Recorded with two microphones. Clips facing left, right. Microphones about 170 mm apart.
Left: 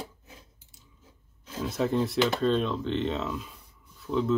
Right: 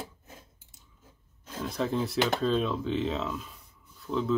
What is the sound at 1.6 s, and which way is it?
Speech, 5° left (ahead or behind).